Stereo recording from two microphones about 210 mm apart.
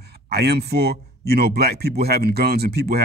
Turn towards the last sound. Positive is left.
turn(degrees=-50)  # may be behind; listen again after turning